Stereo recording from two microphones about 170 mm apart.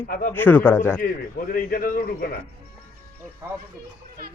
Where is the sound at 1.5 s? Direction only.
55° left (ahead or behind).